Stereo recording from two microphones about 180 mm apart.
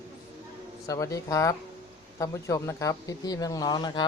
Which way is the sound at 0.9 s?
15° left (ahead or behind).